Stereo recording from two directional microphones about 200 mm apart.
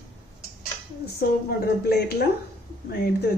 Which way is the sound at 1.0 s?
55° left (ahead or behind).